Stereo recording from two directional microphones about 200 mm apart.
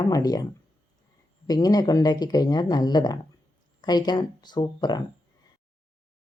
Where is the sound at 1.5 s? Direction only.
20° left (ahead or behind).